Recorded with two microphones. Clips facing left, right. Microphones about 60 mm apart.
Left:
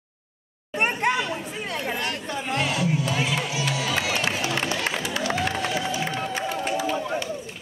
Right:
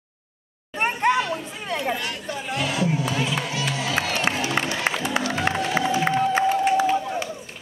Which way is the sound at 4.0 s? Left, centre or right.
Right.